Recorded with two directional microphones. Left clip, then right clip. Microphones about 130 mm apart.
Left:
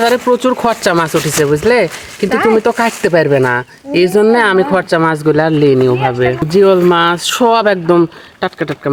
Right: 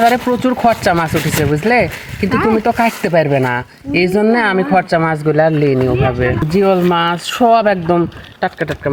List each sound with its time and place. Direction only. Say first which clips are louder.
0.0 s speech: left 2 dB; 25° left (ahead or behind)